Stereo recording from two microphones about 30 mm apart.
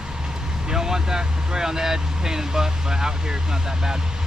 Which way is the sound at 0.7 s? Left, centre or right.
Centre.